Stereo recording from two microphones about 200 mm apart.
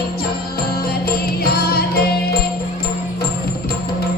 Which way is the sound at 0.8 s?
50° left (ahead or behind).